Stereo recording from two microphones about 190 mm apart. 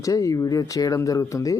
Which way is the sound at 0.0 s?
15° left (ahead or behind).